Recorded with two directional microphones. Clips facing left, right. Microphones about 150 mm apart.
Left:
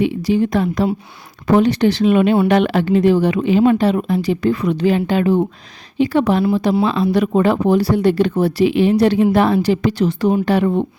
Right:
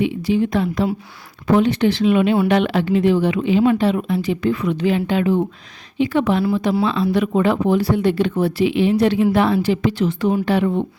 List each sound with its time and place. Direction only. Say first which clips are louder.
0.0 s speech: left 2 dB; 40° left (ahead or behind)